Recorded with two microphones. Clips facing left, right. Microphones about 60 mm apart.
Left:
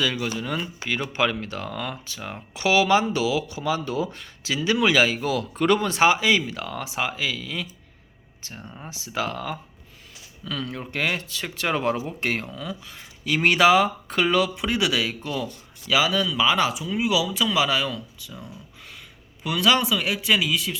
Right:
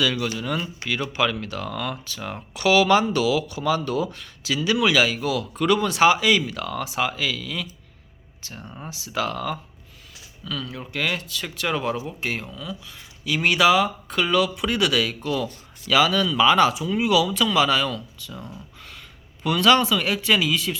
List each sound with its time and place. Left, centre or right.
0.0 s speech: left
10.4 s speech: left
15.9 s speech: centre